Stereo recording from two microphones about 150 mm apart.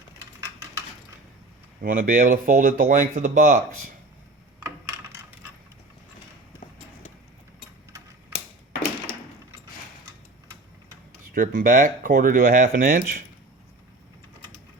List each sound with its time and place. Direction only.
1.8 s speech: 60° right (ahead or behind)
4.6 s a sound: 20° right (ahead or behind)
11.3 s speech: 60° right (ahead or behind)